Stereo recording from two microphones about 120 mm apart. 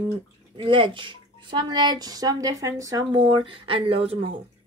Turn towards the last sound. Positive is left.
turn(degrees=-50)  # may be behind; listen again after turning